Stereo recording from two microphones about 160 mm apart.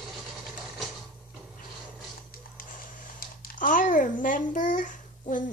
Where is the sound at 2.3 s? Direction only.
65° left (ahead or behind).